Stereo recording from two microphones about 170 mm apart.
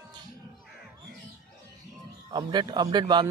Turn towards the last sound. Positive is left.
turn(degrees=-25)  # may be behind; listen again after turning